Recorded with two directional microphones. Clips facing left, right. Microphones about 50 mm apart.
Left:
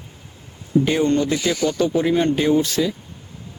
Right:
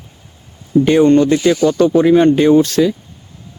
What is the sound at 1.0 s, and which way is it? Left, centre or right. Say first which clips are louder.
Speech: right 9 dB; right.